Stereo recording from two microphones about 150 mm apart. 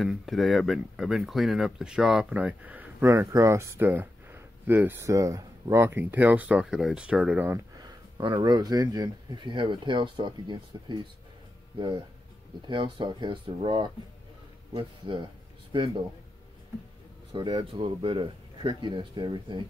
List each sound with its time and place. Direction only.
0.0 s speech: centre (ahead or behind)
7.8 s speech: 30° right (ahead or behind)
12.6 s a man's voice: 30° right (ahead or behind)
17.3 s speech: 35° right (ahead or behind)